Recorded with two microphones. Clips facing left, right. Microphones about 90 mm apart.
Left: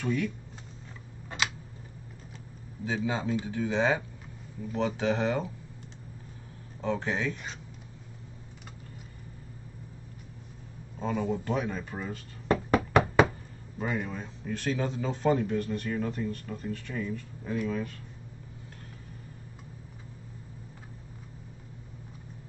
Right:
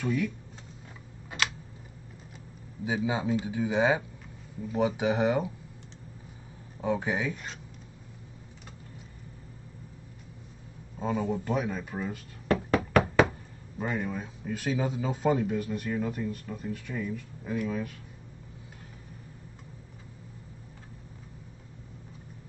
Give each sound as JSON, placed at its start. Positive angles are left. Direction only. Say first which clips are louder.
{"t": 0.0, "sound": "speech", "louder": "right 1 dB", "side_deg": -5}
{"t": 2.8, "sound": "speech", "louder": "right 1 dB", "side_deg": -15}
{"t": 6.8, "sound": "speech", "louder": "right 1 dB", "side_deg": -15}
{"t": 11.0, "sound": "speech", "louder": "right 1 dB", "side_deg": -5}
{"t": 12.4, "sound": "knock", "louder": "left 1 dB", "side_deg": 20}
{"t": 13.7, "sound": "speech", "louder": "right 1 dB", "side_deg": 0}